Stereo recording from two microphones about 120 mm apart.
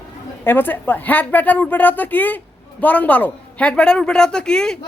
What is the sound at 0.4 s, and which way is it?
A woman's voice, 15° left (ahead or behind).